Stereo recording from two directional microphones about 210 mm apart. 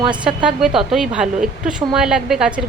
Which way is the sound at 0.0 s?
5° right (ahead or behind).